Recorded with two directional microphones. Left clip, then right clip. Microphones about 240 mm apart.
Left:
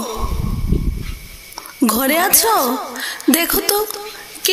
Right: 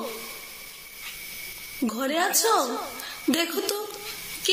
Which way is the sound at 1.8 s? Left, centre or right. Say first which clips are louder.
Left 10 dB; left.